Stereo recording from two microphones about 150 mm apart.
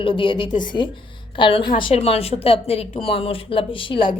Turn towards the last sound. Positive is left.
turn(degrees=35)  # may be behind; listen again after turning